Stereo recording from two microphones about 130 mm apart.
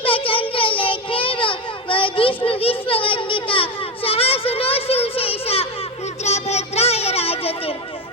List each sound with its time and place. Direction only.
0.0 s child singing: 45° left (ahead or behind)